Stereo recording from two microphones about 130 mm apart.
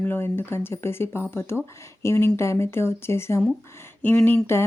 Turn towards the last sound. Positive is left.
turn(degrees=15)  # may be behind; listen again after turning